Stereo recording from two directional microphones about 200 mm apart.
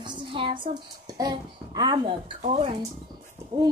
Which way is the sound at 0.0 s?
25° right (ahead or behind).